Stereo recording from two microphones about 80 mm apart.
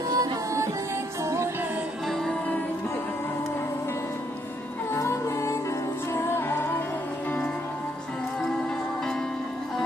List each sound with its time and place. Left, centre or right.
0.1 s music: right
4.9 s music: left